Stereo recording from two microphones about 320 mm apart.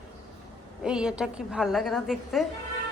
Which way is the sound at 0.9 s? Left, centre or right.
Centre.